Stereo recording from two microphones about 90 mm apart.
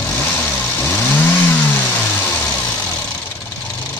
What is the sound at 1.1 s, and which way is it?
Vehicle, 20° left (ahead or behind).